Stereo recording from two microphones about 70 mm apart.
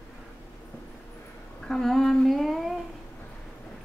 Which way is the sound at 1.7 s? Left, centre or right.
Centre.